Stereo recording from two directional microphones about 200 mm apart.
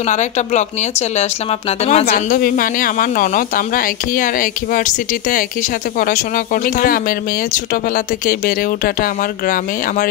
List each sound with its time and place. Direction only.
0.0 s speech: 35° left (ahead or behind)